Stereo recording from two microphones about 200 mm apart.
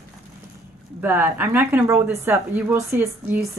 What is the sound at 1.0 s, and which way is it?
Speech, 10° right (ahead or behind).